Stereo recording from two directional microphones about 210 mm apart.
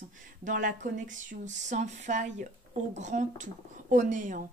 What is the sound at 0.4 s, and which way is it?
Speech, 40° right (ahead or behind).